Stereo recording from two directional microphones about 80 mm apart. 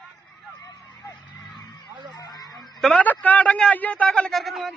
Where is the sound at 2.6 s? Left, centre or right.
Centre.